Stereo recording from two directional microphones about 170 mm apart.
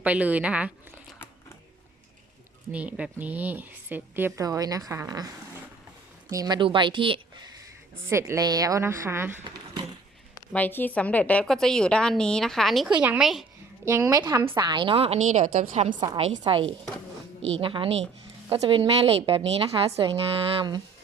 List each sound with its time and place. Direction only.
0.0 s a woman's voice: 10° right (ahead or behind)
2.7 s a woman's voice: 10° right (ahead or behind)
6.3 s a woman's voice: 25° right (ahead or behind)
8.0 s a woman's voice: 15° right (ahead or behind)
10.5 s a woman's voice: 10° left (ahead or behind)
13.8 s a woman's voice: 15° right (ahead or behind); by 16.0 s 45° right (ahead or behind)
16.0 s a woman's voice: 25° right (ahead or behind)